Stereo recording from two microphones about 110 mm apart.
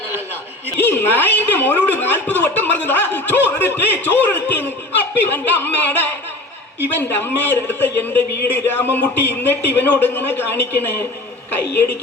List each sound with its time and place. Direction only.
0.8 s a woman's voice: 20° left (ahead or behind)
7.2 s speech: 15° left (ahead or behind)